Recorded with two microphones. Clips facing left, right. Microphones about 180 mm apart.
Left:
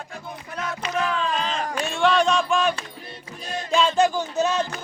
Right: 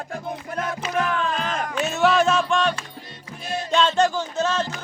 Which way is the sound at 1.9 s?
5° right (ahead or behind).